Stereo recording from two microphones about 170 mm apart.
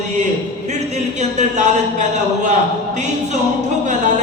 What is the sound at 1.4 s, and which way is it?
A man's voice, 45° right (ahead or behind).